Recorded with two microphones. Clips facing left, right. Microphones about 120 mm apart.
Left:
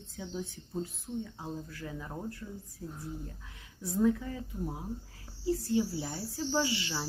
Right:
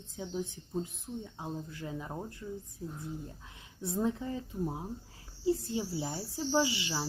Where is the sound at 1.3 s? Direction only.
20° right (ahead or behind).